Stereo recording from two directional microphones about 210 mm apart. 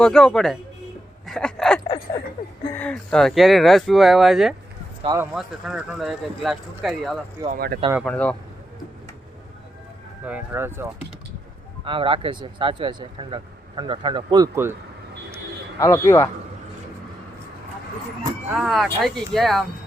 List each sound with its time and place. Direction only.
0.0 s speech: centre (ahead or behind)
5.0 s speech: 15° right (ahead or behind)
5.3 s speech: centre (ahead or behind)
7.4 s speech: 45° right (ahead or behind)
8.0 s speech: 5° left (ahead or behind)
10.2 s speech: 10° right (ahead or behind)
11.9 s speech: 25° right (ahead or behind)
15.8 s speech: 15° left (ahead or behind)
18.5 s speech: centre (ahead or behind)